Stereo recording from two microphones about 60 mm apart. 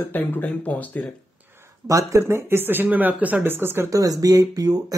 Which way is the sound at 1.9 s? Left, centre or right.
Right.